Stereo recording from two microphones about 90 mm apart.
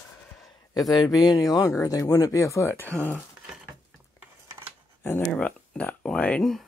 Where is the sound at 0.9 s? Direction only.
45° left (ahead or behind); by 2.9 s 30° left (ahead or behind).